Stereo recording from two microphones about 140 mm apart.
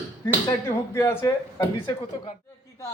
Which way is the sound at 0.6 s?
20° left (ahead or behind).